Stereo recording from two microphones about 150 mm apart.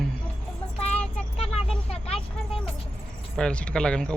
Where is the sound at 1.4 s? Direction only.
45° left (ahead or behind).